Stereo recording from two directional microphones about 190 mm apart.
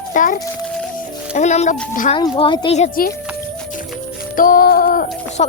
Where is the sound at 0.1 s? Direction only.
45° left (ahead or behind).